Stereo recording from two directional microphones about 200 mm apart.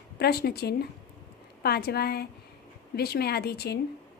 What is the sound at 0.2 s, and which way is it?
A woman's voice, 50° left (ahead or behind).